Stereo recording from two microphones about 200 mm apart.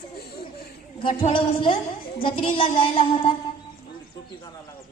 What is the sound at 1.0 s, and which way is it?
Music, 25° left (ahead or behind).